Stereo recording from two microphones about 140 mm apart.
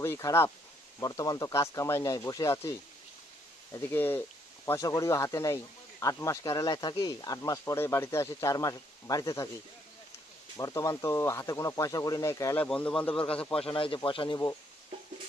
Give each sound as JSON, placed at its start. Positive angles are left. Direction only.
{"t": 0.0, "sound": "speech", "side_deg": 20}
{"t": 3.7, "sound": "speech", "side_deg": 20}
{"t": 10.6, "sound": "speech", "side_deg": 25}
{"t": 12.6, "sound": "speech", "side_deg": 5}
{"t": 13.6, "sound": "a man's voice", "side_deg": 40}